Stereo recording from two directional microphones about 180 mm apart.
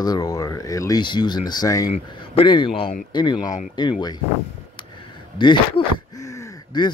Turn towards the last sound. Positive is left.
turn(degrees=20)  # may be behind; listen again after turning